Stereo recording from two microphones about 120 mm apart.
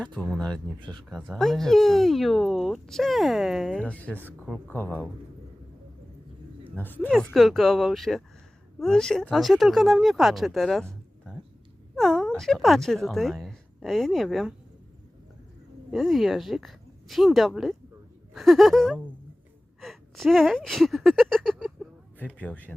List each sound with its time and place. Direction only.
0.0 s speech: 5° left (ahead or behind)
6.7 s speech: 15° left (ahead or behind)
7.1 s speech: centre (ahead or behind)
15.9 s speech: centre (ahead or behind)
19.8 s a sound: centre (ahead or behind)
22.4 s speech: 15° left (ahead or behind)